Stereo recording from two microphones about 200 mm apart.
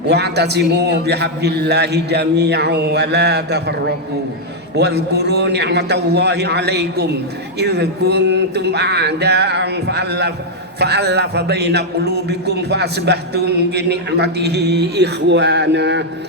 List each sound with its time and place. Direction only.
0.1 s a man's voice: 55° right (ahead or behind)